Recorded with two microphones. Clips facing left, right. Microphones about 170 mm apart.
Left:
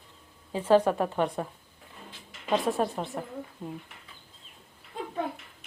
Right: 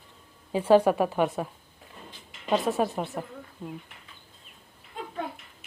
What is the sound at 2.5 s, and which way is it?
A woman's voice, centre (ahead or behind).